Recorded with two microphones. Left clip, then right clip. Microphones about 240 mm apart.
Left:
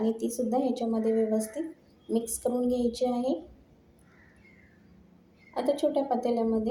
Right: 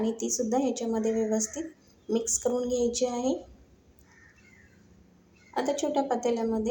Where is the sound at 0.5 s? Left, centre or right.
Right.